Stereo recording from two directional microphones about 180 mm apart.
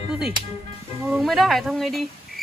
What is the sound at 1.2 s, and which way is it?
Speech, centre (ahead or behind).